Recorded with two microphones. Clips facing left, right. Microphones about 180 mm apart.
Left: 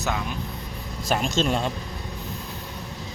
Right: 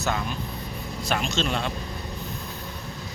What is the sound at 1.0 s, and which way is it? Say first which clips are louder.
Speech: left 3 dB; 45° left (ahead or behind).